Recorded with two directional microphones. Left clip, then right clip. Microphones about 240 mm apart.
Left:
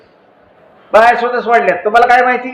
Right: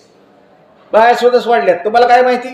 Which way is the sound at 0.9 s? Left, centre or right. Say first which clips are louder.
Even; right.